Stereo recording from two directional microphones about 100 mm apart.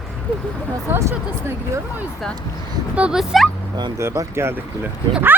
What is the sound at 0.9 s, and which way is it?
Speech, 25° right (ahead or behind).